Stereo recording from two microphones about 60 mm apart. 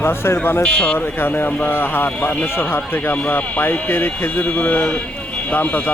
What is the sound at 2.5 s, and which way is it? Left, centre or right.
A man's voice, left.